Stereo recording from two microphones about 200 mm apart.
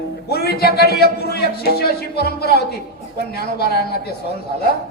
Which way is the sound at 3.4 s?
50° left (ahead or behind).